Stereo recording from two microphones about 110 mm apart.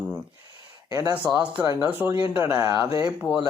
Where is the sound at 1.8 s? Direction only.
20° right (ahead or behind).